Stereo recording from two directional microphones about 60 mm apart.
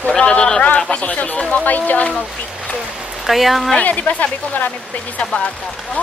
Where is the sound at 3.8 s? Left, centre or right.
Left.